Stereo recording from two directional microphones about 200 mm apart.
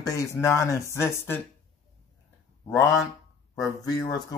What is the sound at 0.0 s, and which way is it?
Speech, 15° left (ahead or behind).